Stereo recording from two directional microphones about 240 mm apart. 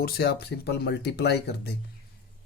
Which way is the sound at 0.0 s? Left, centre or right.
Left.